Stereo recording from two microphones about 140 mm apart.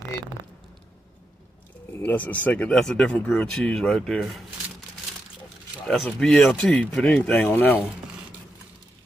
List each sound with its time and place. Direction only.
1.9 s speech: 15° left (ahead or behind)
6.0 s speech: 5° left (ahead or behind)